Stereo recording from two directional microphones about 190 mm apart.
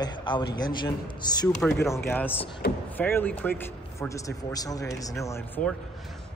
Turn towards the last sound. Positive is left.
turn(degrees=10)  # may be behind; listen again after turning